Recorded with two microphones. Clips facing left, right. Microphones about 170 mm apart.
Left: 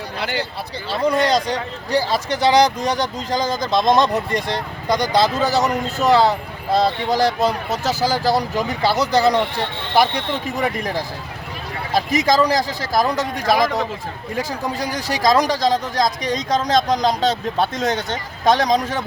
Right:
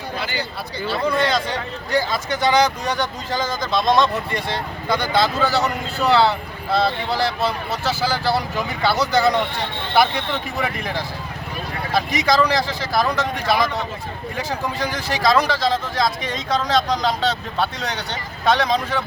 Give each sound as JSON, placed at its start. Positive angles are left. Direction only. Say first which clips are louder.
{"t": 0.9, "sound": "speech", "louder": "left 3 dB", "side_deg": 35}
{"t": 10.6, "sound": "speech", "louder": "left 3 dB", "side_deg": 40}